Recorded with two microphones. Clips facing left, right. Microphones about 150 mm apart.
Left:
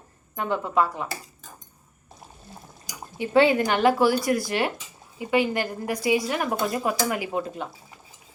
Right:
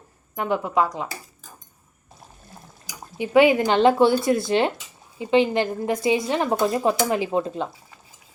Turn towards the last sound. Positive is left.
turn(degrees=-25)  # may be behind; listen again after turning